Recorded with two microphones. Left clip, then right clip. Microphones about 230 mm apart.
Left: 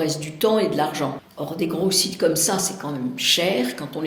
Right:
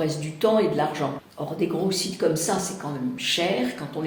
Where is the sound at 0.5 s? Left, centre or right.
Left.